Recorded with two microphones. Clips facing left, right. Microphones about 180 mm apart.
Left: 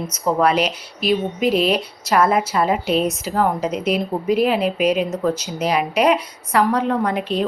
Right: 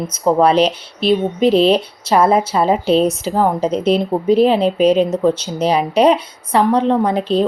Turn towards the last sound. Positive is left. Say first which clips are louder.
# right 5 dB
turn(degrees=-30)  # may be behind; listen again after turning